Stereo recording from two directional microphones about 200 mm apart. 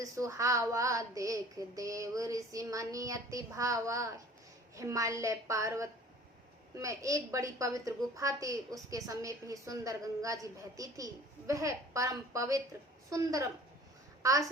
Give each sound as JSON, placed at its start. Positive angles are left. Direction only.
{"t": 0.0, "sound": "a woman's voice", "side_deg": -15}